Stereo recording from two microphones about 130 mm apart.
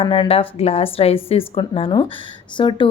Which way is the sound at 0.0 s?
45° left (ahead or behind).